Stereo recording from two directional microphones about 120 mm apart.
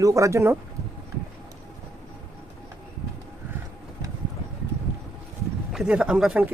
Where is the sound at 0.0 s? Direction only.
25° right (ahead or behind).